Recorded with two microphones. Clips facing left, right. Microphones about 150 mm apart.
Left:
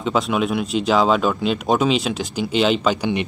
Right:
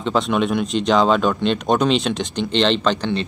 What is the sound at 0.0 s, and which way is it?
Speech, 5° left (ahead or behind).